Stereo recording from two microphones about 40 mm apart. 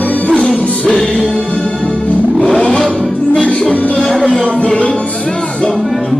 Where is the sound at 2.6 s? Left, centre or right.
Left.